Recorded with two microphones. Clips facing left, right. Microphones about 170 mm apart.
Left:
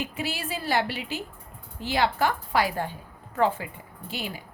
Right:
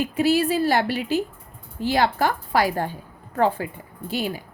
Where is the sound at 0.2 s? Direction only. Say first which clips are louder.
Right 13 dB; 40° right (ahead or behind).